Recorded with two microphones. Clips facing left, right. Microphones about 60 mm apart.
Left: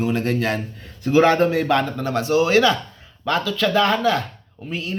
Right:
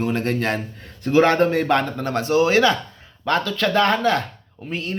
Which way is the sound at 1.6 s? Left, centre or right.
Right.